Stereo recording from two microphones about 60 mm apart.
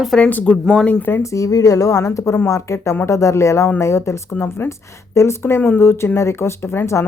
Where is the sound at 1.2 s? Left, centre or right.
Left.